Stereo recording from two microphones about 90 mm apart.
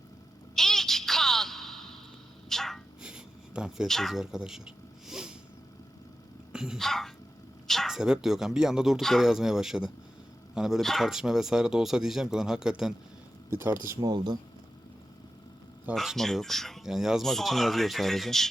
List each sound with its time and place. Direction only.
0.5 s a sound: 5° left (ahead or behind)
2.5 s sneeze: 5° left (ahead or behind)
3.0 s a sound: 10° right (ahead or behind)
3.8 s speech: centre (ahead or behind)
6.5 s speech: 5° right (ahead or behind)
13.5 s speech: 25° right (ahead or behind)
14.1 s speech: 50° right (ahead or behind)
16.0 s speech: 5° left (ahead or behind)